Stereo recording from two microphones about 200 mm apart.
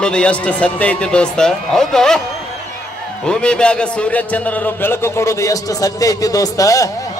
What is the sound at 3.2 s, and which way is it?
A man's voice, 5° left (ahead or behind).